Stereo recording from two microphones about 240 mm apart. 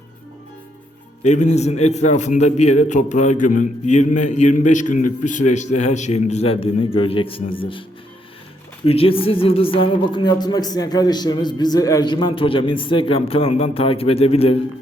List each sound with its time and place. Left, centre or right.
1.2 s speech: left
8.9 s speech: left